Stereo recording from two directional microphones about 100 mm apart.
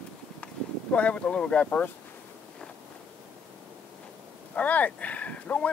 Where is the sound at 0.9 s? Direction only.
10° left (ahead or behind).